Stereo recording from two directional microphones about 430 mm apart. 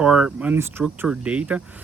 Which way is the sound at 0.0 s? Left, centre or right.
Centre.